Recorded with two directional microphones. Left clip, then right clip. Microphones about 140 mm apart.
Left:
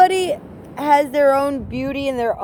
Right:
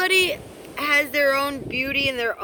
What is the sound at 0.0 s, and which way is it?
Speech, 25° right (ahead or behind).